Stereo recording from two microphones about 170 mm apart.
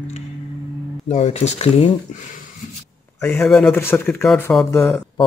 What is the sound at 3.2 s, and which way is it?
Speech, 5° left (ahead or behind).